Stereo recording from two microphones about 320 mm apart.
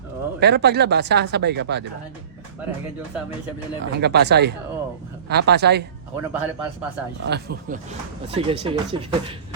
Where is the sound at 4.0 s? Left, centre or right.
Right.